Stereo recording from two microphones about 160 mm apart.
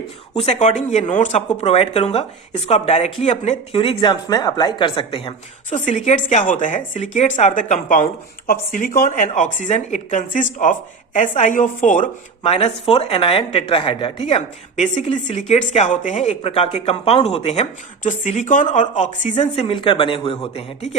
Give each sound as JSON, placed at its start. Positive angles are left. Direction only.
{"t": 0.3, "sound": "a woman's voice", "side_deg": 40}
{"t": 3.8, "sound": "speech", "side_deg": 30}
{"t": 5.7, "sound": "a woman's voice", "side_deg": 45}
{"t": 12.4, "sound": "a woman's voice", "side_deg": 40}
{"t": 19.4, "sound": "a woman's voice", "side_deg": 35}